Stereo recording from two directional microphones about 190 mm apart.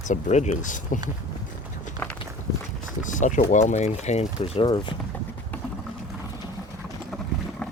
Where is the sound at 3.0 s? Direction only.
40° left (ahead or behind); by 4.9 s 25° left (ahead or behind).